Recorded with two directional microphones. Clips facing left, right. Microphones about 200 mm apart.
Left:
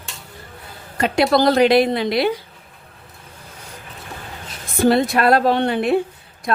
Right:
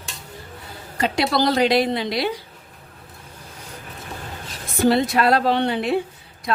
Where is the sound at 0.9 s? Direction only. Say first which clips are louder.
Left 4 dB; 55° left (ahead or behind).